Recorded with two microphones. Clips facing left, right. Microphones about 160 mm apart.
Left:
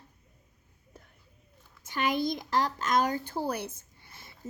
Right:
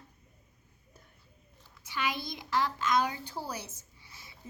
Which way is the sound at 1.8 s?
50° left (ahead or behind).